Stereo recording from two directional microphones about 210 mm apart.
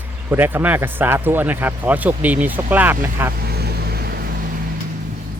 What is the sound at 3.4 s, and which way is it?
Vehicle, 50° right (ahead or behind).